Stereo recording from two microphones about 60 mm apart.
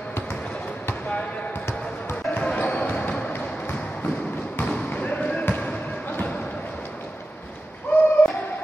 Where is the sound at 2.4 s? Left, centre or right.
Left.